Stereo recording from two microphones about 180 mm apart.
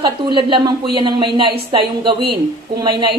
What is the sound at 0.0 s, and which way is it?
A woman's voice, 25° right (ahead or behind).